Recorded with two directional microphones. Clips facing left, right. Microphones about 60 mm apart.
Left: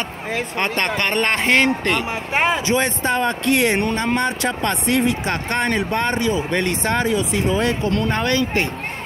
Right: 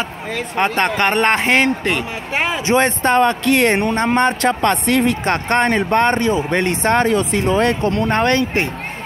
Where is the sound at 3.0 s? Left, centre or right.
Right.